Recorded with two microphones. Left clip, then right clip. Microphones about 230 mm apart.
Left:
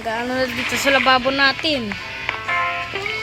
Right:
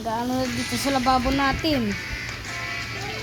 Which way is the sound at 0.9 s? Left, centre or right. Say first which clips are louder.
Left 6 dB; left.